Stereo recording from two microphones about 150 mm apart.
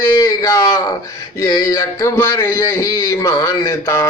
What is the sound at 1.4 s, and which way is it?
Speech, 25° left (ahead or behind).